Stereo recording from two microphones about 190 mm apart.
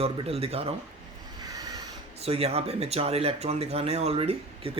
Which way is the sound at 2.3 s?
35° right (ahead or behind).